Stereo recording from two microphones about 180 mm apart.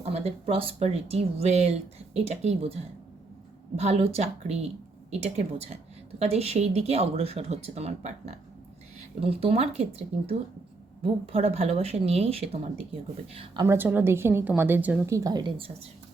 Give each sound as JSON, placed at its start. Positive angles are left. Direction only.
{"t": 0.0, "sound": "speech", "side_deg": -35}
{"t": 3.8, "sound": "speech", "side_deg": -35}
{"t": 13.7, "sound": "a woman's voice", "side_deg": -10}